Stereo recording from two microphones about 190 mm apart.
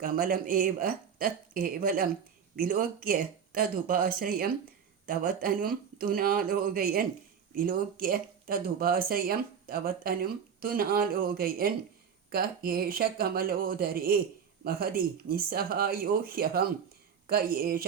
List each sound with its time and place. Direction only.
0.0 s speech: 50° right (ahead or behind)